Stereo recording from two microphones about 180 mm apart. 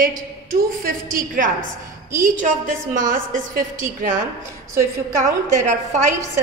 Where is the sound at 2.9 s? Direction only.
45° right (ahead or behind).